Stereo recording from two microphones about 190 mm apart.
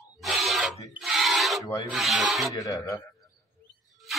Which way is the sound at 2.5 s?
15° left (ahead or behind).